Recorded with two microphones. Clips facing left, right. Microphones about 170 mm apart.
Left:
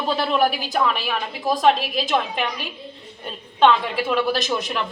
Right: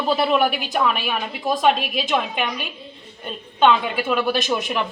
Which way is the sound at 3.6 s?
5° right (ahead or behind).